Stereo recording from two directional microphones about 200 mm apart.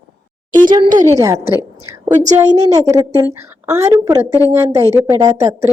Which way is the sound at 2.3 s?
15° right (ahead or behind).